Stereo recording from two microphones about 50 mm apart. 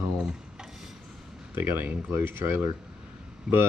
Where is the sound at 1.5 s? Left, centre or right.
Right.